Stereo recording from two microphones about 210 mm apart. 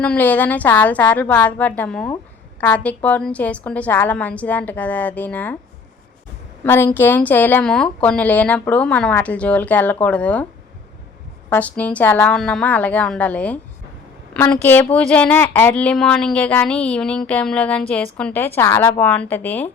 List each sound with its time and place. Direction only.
0.0 s a woman's voice: 5° left (ahead or behind)
6.7 s a woman's voice: 10° left (ahead or behind)
11.4 s a woman's voice: 10° left (ahead or behind)